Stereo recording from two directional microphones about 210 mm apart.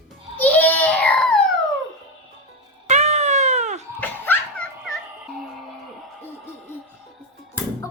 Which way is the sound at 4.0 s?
10° left (ahead or behind).